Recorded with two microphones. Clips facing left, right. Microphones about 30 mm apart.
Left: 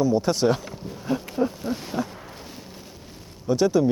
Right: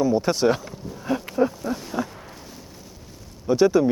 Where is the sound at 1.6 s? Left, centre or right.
Centre.